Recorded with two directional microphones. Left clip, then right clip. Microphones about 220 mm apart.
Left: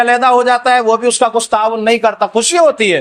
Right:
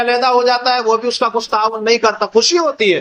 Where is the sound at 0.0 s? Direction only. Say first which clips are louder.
Left 3 dB; 45° left (ahead or behind).